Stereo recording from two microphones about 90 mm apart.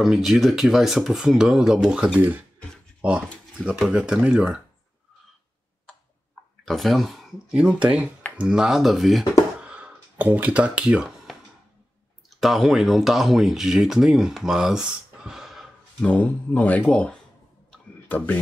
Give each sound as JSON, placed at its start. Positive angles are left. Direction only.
{"t": 0.0, "sound": "speech", "side_deg": -5}
{"t": 6.6, "sound": "speech", "side_deg": 5}
{"t": 7.5, "sound": "speech", "side_deg": -10}
{"t": 9.6, "sound": "a sound", "side_deg": -15}
{"t": 12.4, "sound": "speech", "side_deg": 0}
{"t": 16.1, "sound": "speech", "side_deg": 15}